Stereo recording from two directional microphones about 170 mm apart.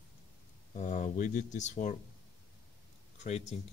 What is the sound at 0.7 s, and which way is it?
Speech, 45° left (ahead or behind).